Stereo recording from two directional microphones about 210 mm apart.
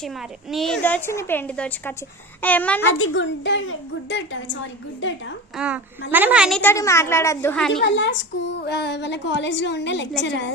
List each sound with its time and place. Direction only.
0.0 s a woman's voice: centre (ahead or behind)
3.0 s a woman's voice: 65° left (ahead or behind)
5.5 s a woman's voice: 5° right (ahead or behind)
6.6 s a woman's voice: 10° left (ahead or behind)
7.7 s a woman's voice: 55° left (ahead or behind)